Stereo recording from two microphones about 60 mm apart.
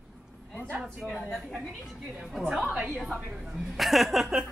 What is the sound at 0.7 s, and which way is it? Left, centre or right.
Speech, right.